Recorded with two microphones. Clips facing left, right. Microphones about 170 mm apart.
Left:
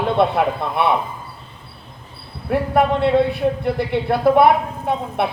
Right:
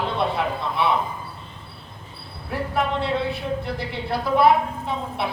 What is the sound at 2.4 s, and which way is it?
A woman's voice, 55° left (ahead or behind).